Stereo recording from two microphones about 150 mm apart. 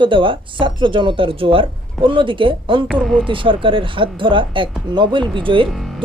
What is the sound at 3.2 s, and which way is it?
A woman's voice, 35° right (ahead or behind).